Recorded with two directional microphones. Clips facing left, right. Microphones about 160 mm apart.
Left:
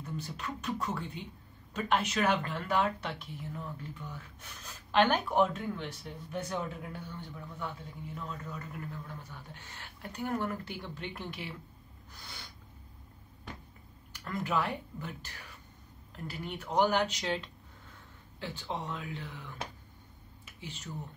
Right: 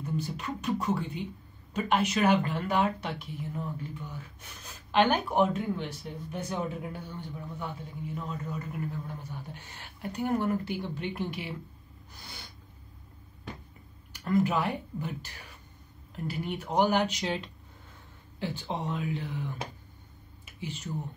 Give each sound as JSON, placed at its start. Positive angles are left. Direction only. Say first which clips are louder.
{"t": 0.0, "sound": "speech", "louder": "right 6 dB", "side_deg": -10}
{"t": 4.9, "sound": "speech", "louder": "right 2 dB", "side_deg": -5}
{"t": 14.2, "sound": "speech", "louder": "right 6 dB", "side_deg": -15}
{"t": 16.3, "sound": "speech", "louder": "right 5 dB", "side_deg": -10}